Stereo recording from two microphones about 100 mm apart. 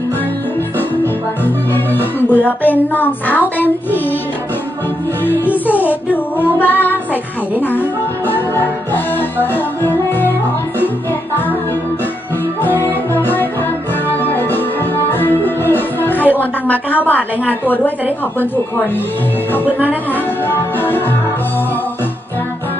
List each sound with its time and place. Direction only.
0.7 s music: 20° left (ahead or behind)
5.2 s music: 20° left (ahead or behind)
6.6 s a woman's voice: 20° left (ahead or behind)
8.3 s music: 20° left (ahead or behind)
12.6 s music: 20° left (ahead or behind)
16.3 s a woman's voice: 15° left (ahead or behind)
20.4 s music: 20° left (ahead or behind)